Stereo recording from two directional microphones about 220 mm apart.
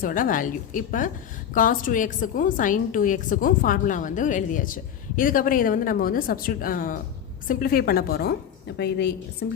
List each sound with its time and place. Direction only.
0.0 s a woman's voice: 40° left (ahead or behind)